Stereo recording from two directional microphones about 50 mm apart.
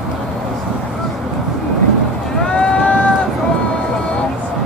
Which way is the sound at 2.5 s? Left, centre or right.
Left.